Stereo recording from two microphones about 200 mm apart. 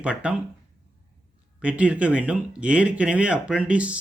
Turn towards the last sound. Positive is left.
turn(degrees=-5)  # may be behind; listen again after turning